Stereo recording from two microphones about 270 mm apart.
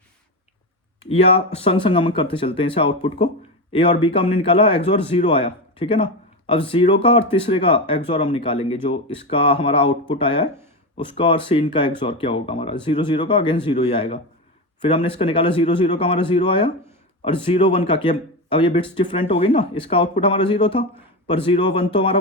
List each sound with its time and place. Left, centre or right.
1.0 s speech: left